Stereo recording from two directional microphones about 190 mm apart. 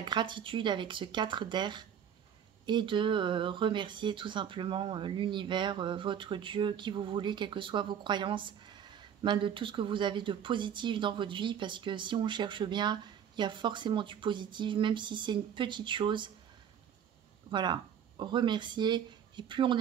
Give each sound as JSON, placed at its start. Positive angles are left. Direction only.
{"t": 0.0, "sound": "speech", "side_deg": -25}
{"t": 17.5, "sound": "speech", "side_deg": -25}